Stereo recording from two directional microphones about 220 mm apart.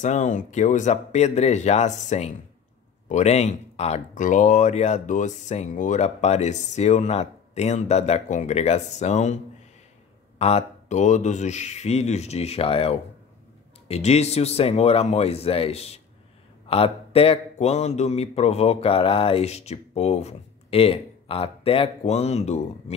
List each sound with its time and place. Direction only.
0.0 s speech: 35° left (ahead or behind)
10.4 s speech: 30° left (ahead or behind)